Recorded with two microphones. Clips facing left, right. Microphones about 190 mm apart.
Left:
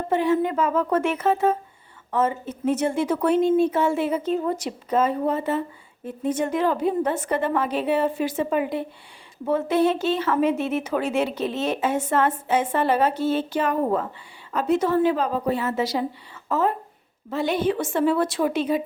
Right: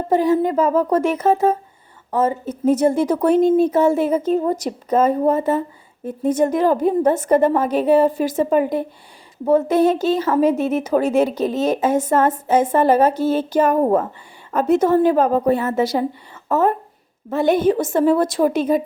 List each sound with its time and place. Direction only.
0.1 s a woman's voice: 40° right (ahead or behind)